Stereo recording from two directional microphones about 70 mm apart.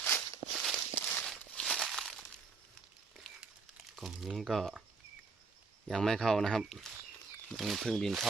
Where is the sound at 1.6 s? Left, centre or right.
Centre.